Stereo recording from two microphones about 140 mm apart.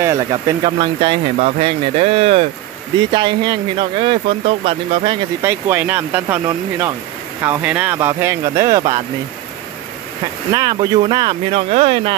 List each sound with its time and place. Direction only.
0.0 s speech: 25° right (ahead or behind)
0.7 s speech: 40° right (ahead or behind)
5.4 s speech: 15° right (ahead or behind)
10.5 s speech: 30° right (ahead or behind); by 12.2 s 45° right (ahead or behind)